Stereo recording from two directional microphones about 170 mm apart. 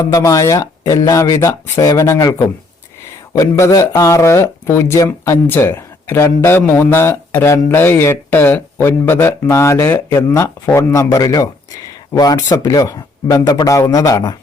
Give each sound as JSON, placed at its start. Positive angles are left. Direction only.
{"t": 0.1, "sound": "speech", "side_deg": 20}